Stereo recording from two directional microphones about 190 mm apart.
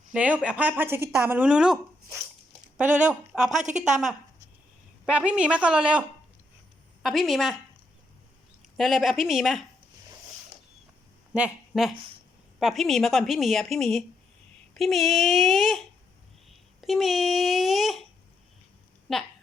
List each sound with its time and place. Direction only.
0.1 s speech: 5° right (ahead or behind)
3.1 s a woman's voice: 5° right (ahead or behind)
3.6 s a woman's voice: 40° right (ahead or behind)
5.0 s a woman's voice: 5° right (ahead or behind)
8.8 s a woman's voice: centre (ahead or behind)
11.3 s a woman's voice: 5° right (ahead or behind)
19.1 s a woman's voice: centre (ahead or behind)